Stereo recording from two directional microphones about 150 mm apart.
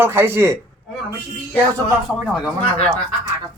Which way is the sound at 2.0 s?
5° right (ahead or behind).